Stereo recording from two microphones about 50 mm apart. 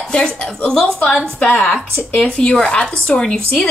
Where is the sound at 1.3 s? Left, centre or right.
Left.